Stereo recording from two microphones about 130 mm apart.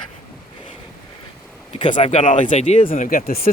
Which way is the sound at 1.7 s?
65° left (ahead or behind).